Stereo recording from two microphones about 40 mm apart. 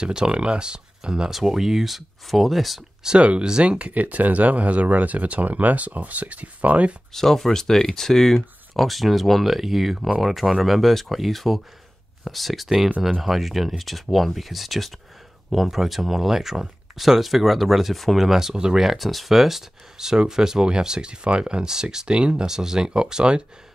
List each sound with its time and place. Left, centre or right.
0.0 s speech: right
1.3 s speech: centre
3.2 s speech: right
7.1 s speech: centre
22.0 s speech: right
22.5 s speech: centre